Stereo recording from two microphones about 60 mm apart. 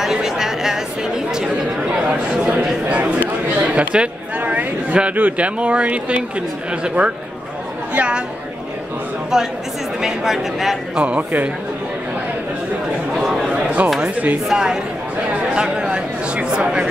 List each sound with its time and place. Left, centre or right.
0.0 s chatter: centre
2.3 s a man's voice: centre
9.3 s speech: centre
11.0 s speech: right
13.2 s a sound: centre
13.5 s a sound: right
14.0 s speech: right
14.5 s speech: centre